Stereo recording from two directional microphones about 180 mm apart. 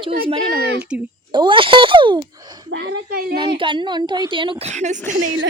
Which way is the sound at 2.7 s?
70° right (ahead or behind).